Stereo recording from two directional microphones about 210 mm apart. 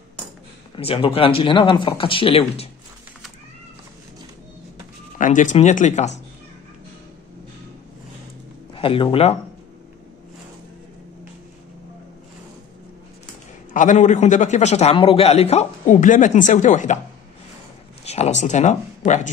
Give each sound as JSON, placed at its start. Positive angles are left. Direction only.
{"t": 0.7, "sound": "speech", "side_deg": 25}
{"t": 5.2, "sound": "a man's voice", "side_deg": 35}
{"t": 8.7, "sound": "speech", "side_deg": 25}
{"t": 13.7, "sound": "a man's voice", "side_deg": 35}
{"t": 18.0, "sound": "a man's voice", "side_deg": 30}